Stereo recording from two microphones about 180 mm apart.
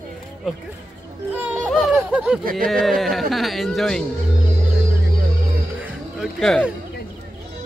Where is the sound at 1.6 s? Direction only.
Centre (ahead or behind).